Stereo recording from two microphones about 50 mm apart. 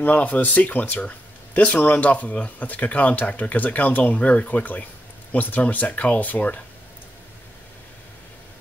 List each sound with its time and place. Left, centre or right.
0.0 s speech: left